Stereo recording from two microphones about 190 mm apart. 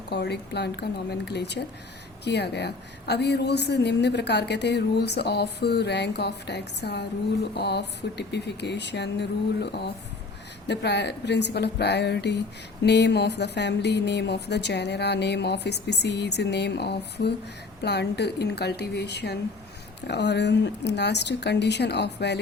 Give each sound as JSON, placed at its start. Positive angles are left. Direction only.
{"t": 0.1, "sound": "a woman's voice", "side_deg": 60}
{"t": 10.7, "sound": "a woman's voice", "side_deg": 65}